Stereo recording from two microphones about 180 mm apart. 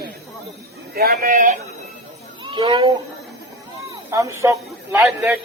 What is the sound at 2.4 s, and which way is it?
Speech, 30° right (ahead or behind).